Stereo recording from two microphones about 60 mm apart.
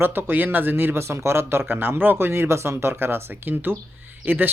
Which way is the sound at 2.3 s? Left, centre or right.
Right.